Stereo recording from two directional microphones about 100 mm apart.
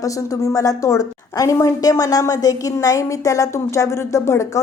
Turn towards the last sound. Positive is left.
turn(degrees=30)  # may be behind; listen again after turning